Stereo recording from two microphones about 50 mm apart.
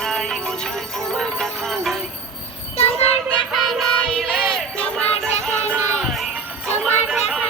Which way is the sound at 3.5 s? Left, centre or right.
Centre.